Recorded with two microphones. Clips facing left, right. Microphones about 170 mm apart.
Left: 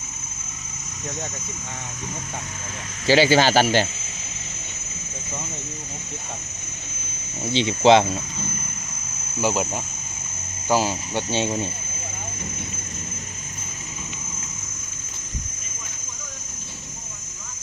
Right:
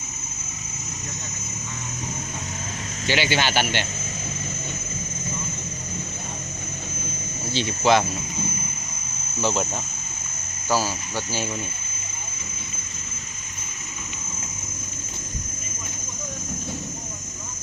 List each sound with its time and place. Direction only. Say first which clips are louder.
3.1 s speech: left 7 dB; 35° left (ahead or behind)
7.5 s speech: left 4 dB; 20° left (ahead or behind)
9.4 s speech: left 1 dB; 10° left (ahead or behind); by 11.6 s 25° left (ahead or behind)